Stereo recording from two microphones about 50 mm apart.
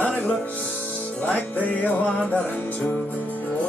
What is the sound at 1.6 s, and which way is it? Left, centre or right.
Music, left.